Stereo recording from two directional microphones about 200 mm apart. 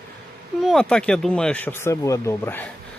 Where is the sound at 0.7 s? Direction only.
5° left (ahead or behind).